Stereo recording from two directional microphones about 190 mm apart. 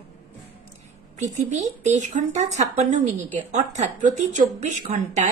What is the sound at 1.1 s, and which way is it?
A woman's voice, 40° right (ahead or behind).